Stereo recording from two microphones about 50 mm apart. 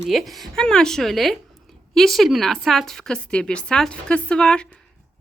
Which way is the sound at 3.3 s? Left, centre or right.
Left.